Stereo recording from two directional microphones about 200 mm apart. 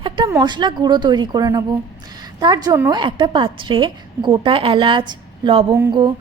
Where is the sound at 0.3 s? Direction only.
20° right (ahead or behind).